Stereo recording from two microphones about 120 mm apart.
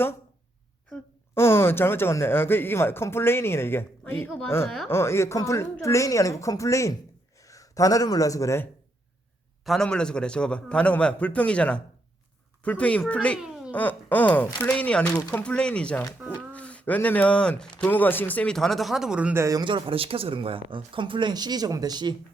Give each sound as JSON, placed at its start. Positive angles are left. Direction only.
{"t": 1.4, "sound": "a man's voice", "side_deg": 20}
{"t": 9.6, "sound": "speech", "side_deg": 5}
{"t": 13.4, "sound": "a sound", "side_deg": -5}
{"t": 13.7, "sound": "speech", "side_deg": 15}
{"t": 19.4, "sound": "speech", "side_deg": -30}
{"t": 19.6, "sound": "speech", "side_deg": -45}